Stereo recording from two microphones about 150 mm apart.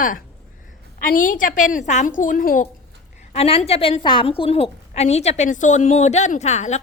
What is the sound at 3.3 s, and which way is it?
A woman's voice, 45° left (ahead or behind).